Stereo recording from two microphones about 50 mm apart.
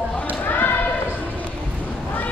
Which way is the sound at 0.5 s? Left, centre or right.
Left.